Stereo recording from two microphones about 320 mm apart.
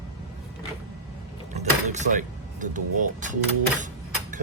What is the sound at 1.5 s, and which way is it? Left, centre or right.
Speech, right.